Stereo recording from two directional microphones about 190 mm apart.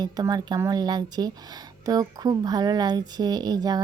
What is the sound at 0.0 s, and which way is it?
Speech, 20° right (ahead or behind).